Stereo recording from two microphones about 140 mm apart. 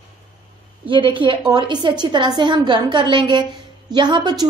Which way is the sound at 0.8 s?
35° right (ahead or behind).